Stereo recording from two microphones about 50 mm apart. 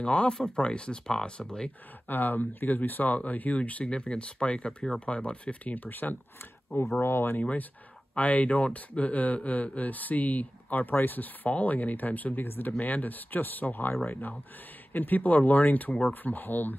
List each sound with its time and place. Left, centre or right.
0.0 s speech: left
2.0 s speech: left
5.9 s speech: left
7.0 s speech: left
8.1 s speech: left
12.4 s speech: left
12.7 s speech: left